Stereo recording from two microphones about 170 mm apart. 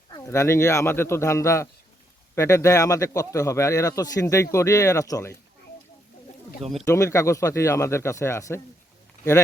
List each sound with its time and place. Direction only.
0.2 s speech: 15° left (ahead or behind)
6.8 s speech: 15° left (ahead or behind)